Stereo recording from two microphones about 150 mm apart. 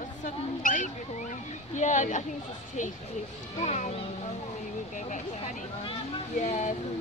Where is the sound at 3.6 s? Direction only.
50° left (ahead or behind).